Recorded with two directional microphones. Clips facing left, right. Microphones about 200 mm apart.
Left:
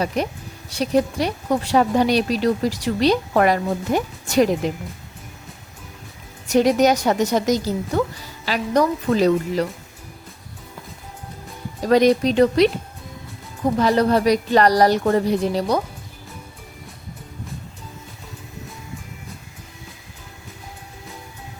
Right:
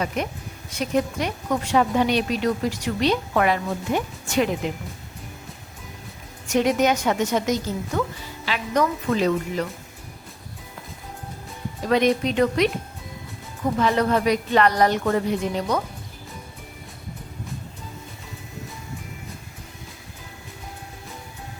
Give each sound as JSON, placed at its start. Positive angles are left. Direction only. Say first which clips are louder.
{"t": 0.1, "sound": "speech", "louder": "left 4 dB", "side_deg": 35}
{"t": 6.5, "sound": "speech", "louder": "left 4 dB", "side_deg": 35}
{"t": 11.9, "sound": "speech", "louder": "left 5 dB", "side_deg": 35}
{"t": 13.7, "sound": "speech", "louder": "left 3 dB", "side_deg": 35}